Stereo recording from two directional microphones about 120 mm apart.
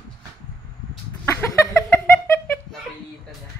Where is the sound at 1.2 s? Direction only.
20° left (ahead or behind).